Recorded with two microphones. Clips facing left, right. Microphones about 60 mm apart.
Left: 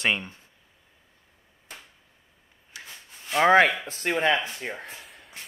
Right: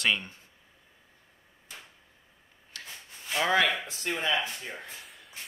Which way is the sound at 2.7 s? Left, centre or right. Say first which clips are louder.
Left 1 dB; centre.